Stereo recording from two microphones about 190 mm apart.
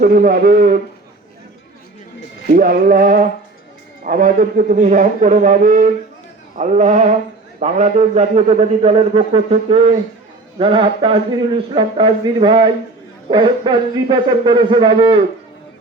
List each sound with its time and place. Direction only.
0.0 s a man's voice: 50° right (ahead or behind)
2.5 s a man's voice: 45° right (ahead or behind); by 15.2 s 25° right (ahead or behind)